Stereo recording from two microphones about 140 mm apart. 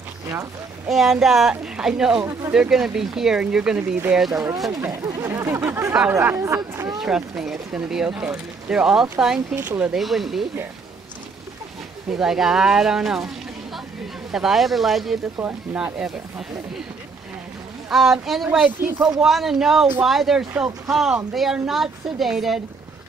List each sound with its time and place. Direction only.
0.8 s speech: centre (ahead or behind)
4.7 s speech: 20° right (ahead or behind)
7.0 s speech: 5° right (ahead or behind)
12.1 s speech: 5° right (ahead or behind)
14.3 s speech: centre (ahead or behind)
15.3 s speech: 10° right (ahead or behind)
17.8 s speech: centre (ahead or behind)